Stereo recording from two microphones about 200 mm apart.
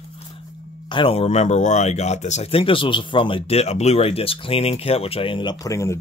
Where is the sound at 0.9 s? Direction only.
25° left (ahead or behind).